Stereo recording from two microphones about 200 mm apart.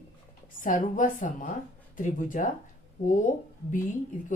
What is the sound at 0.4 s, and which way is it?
Speech, 40° left (ahead or behind).